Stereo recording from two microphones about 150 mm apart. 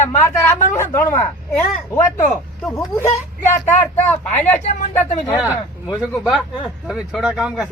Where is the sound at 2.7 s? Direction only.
20° left (ahead or behind).